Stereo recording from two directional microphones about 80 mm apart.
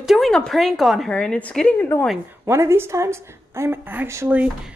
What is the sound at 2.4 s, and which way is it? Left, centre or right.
A woman's voice, right.